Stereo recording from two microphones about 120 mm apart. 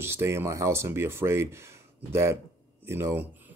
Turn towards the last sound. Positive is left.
turn(degrees=-20)  # may be behind; listen again after turning